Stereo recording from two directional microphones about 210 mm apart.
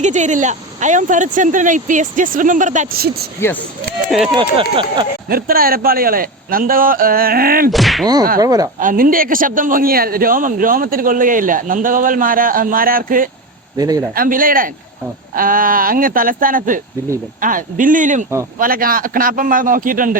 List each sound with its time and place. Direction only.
0.0 s a man's voice: 35° right (ahead or behind)
4.1 s speech: centre (ahead or behind)
5.3 s a man's voice: 45° right (ahead or behind)
7.7 s speech: centre (ahead or behind)
8.0 s whack: 20° right (ahead or behind)
8.4 s speech: 15° right (ahead or behind)
8.8 s a man's voice: 40° right (ahead or behind)
13.7 s speech: 15° right (ahead or behind)
14.2 s a man's voice: 40° right (ahead or behind)